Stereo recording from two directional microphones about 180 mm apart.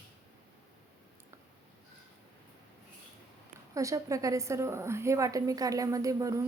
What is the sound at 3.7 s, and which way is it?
A woman's voice, 20° right (ahead or behind).